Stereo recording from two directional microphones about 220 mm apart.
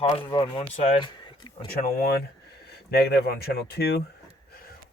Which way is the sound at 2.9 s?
45° left (ahead or behind).